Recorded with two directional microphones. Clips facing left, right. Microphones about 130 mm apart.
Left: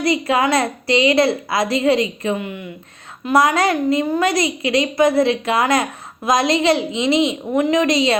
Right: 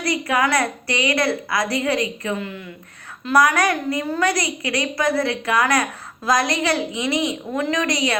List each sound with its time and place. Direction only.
0.0 s a woman's voice: 25° left (ahead or behind)